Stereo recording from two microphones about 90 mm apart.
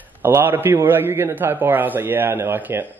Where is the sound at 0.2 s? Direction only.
25° right (ahead or behind).